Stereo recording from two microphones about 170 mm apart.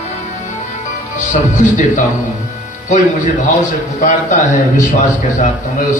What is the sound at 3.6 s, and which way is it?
Speech, 45° left (ahead or behind).